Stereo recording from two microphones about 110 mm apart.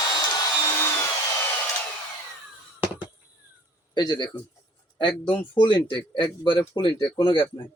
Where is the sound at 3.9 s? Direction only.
40° left (ahead or behind).